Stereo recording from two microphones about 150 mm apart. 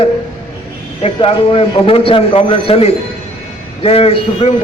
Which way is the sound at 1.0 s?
35° left (ahead or behind).